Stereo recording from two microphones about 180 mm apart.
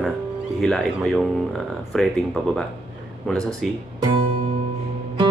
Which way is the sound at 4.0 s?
30° right (ahead or behind).